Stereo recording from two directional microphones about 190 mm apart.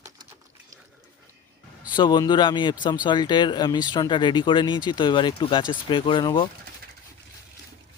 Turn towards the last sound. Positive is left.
turn(degrees=25)  # may be behind; listen again after turning